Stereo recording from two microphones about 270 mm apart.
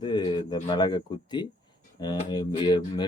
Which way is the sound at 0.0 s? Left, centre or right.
Centre.